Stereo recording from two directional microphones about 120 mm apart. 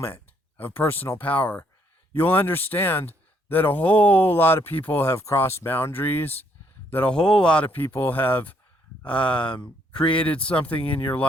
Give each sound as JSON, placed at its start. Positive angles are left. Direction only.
{"t": 0.0, "sound": "speech", "side_deg": 15}